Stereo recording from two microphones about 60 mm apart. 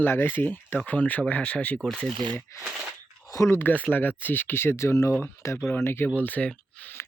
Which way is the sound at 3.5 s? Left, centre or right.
Left.